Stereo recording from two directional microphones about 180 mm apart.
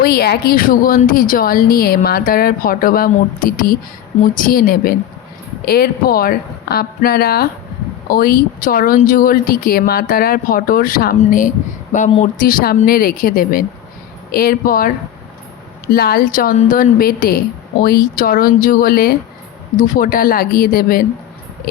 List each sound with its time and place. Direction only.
0.0 s a woman's voice: 60° left (ahead or behind)